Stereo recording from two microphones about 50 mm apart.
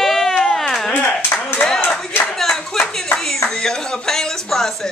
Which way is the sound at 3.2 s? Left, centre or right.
Centre.